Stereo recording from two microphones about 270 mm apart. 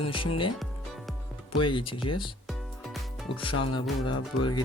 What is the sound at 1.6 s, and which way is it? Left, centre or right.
Speech, centre.